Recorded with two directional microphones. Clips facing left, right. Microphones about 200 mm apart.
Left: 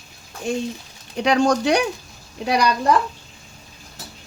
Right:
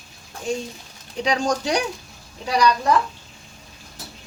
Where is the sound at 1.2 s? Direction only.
60° left (ahead or behind).